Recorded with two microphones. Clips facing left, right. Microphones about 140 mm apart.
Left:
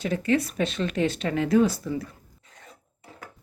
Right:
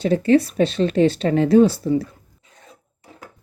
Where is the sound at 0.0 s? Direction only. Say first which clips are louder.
Right 8 dB; 30° right (ahead or behind).